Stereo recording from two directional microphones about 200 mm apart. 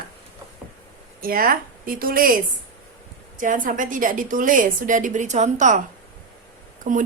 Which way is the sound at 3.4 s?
40° right (ahead or behind).